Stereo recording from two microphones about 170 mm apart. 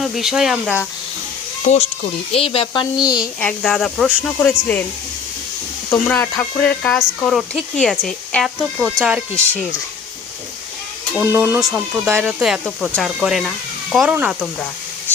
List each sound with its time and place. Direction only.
0.0 s speech: centre (ahead or behind)
1.7 s speech: 40° left (ahead or behind); by 3.2 s 25° left (ahead or behind)
3.4 s speech: 5° left (ahead or behind)
5.9 s speech: 10° left (ahead or behind); by 9.6 s 10° right (ahead or behind)
11.2 s speech: 15° right (ahead or behind)